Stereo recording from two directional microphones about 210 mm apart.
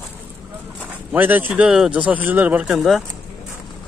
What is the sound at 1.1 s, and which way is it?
Speech, 10° right (ahead or behind).